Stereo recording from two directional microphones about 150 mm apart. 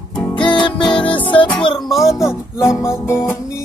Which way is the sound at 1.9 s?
Centre (ahead or behind).